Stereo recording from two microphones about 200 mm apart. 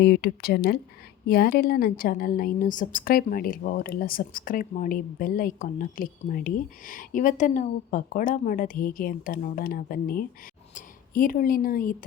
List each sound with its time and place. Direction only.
0.0 s a woman's voice: 50° left (ahead or behind)